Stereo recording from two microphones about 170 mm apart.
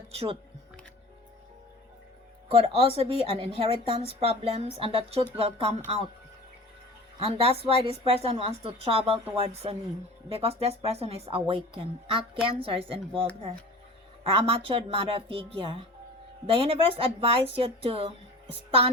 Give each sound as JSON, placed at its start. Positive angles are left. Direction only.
{"t": 2.5, "sound": "speech", "side_deg": -35}
{"t": 7.2, "sound": "speech", "side_deg": -35}
{"t": 14.3, "sound": "speech", "side_deg": -35}